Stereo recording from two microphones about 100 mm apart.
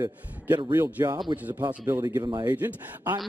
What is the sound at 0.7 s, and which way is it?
Speech, 25° right (ahead or behind).